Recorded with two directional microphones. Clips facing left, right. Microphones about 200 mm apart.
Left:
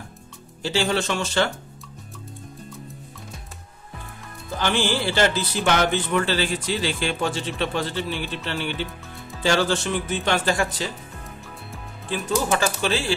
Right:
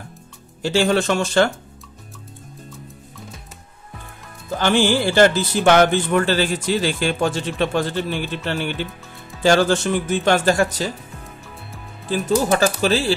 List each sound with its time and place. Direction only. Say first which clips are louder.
0.6 s speech: right 5 dB; 50° right (ahead or behind)
4.6 s speech: right 6 dB; 50° right (ahead or behind)
12.1 s speech: right 5 dB; 35° right (ahead or behind)